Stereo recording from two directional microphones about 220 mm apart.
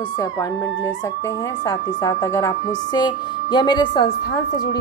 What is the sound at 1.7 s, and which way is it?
A woman's voice, 15° left (ahead or behind).